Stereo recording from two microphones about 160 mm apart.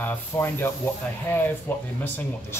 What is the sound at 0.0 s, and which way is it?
Speech, 15° left (ahead or behind).